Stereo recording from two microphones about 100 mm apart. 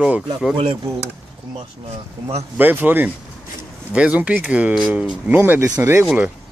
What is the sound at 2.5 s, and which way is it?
Speech, 20° right (ahead or behind).